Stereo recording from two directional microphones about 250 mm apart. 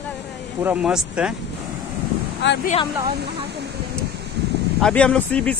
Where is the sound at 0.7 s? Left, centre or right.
Centre.